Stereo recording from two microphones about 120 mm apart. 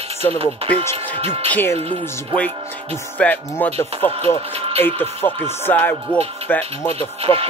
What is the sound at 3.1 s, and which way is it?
Speech, 15° left (ahead or behind).